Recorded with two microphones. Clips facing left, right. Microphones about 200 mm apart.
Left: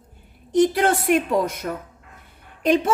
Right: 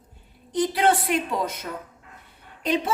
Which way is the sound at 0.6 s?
45° left (ahead or behind).